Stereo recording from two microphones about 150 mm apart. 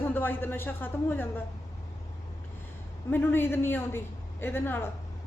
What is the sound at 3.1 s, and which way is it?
A woman's voice, 15° left (ahead or behind).